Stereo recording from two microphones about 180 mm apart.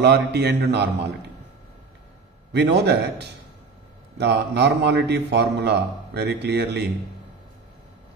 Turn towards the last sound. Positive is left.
turn(degrees=-70)  # may be behind; listen again after turning